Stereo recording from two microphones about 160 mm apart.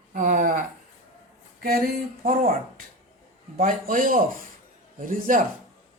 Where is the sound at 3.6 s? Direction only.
55° right (ahead or behind).